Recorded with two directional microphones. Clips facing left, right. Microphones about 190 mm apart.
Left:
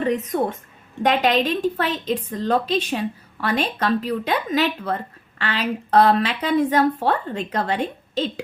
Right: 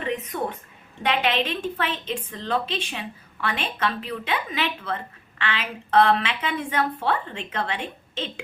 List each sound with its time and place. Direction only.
0.0 s a woman's voice: 40° left (ahead or behind)